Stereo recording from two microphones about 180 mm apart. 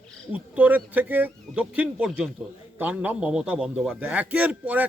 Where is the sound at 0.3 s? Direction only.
10° right (ahead or behind).